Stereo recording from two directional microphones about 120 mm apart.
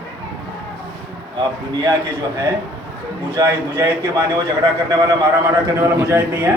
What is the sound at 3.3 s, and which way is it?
Speech, 25° right (ahead or behind).